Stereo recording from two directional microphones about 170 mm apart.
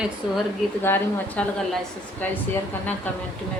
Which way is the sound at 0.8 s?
15° left (ahead or behind).